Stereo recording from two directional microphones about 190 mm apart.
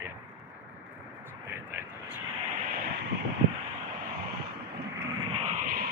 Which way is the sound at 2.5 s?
50° right (ahead or behind).